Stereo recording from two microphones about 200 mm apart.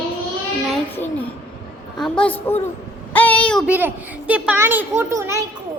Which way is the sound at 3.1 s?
10° left (ahead or behind).